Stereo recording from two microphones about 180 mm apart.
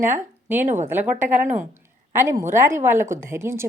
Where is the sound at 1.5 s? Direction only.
15° right (ahead or behind).